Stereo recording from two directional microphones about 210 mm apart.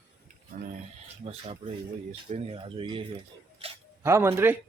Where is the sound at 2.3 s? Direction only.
25° right (ahead or behind).